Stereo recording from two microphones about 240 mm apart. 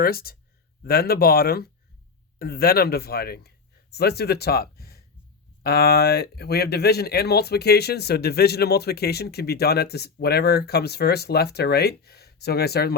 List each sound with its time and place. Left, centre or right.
0.0 s speech: left